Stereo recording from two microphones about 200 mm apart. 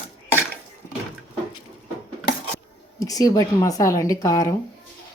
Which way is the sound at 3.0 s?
20° left (ahead or behind).